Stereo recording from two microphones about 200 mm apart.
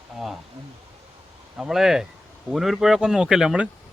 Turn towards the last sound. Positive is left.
turn(degrees=-5)  # may be behind; listen again after turning